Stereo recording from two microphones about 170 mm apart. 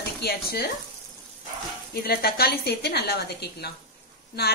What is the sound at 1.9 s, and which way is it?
A woman's voice, 65° left (ahead or behind).